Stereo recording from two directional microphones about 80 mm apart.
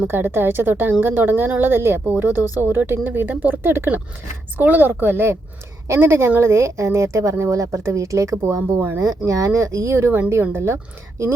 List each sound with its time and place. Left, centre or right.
0.1 s speech: right
9.0 s speech: right